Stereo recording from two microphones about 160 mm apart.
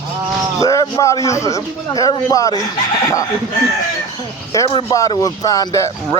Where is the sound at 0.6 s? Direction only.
20° left (ahead or behind).